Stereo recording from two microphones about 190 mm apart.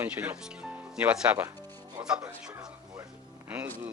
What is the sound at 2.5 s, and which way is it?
Music, 15° right (ahead or behind).